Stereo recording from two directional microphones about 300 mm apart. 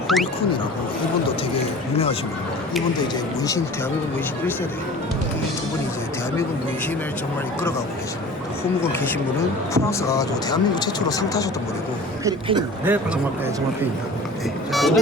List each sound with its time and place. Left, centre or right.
0.1 s speech: left
9.7 s speech: centre
12.2 s speech: centre
14.7 s speech: centre